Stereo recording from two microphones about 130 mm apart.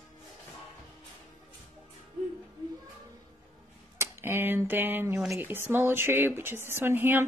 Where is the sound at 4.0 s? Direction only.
20° right (ahead or behind).